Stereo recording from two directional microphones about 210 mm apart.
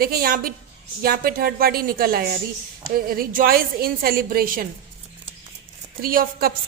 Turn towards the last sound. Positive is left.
turn(degrees=-45)  # may be behind; listen again after turning